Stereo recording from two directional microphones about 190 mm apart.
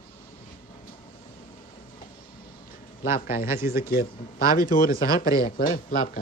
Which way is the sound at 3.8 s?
50° left (ahead or behind).